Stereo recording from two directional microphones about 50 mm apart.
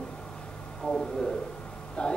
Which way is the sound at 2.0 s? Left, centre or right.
Left.